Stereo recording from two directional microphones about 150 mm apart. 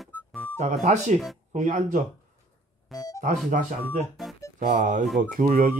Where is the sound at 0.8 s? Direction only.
50° right (ahead or behind).